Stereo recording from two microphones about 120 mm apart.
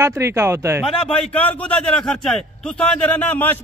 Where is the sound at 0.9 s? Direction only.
55° left (ahead or behind).